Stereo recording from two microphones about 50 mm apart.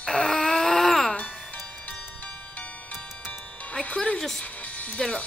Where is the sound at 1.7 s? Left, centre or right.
Left.